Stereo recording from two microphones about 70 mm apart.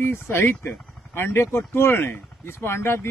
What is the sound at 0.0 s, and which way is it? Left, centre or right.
Speech, left.